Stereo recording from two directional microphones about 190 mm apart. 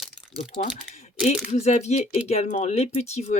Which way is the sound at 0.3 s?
30° left (ahead or behind).